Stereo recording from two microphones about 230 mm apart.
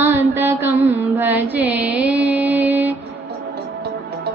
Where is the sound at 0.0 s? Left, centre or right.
Centre.